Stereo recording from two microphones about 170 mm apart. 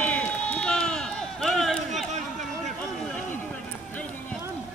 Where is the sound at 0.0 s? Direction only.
5° left (ahead or behind).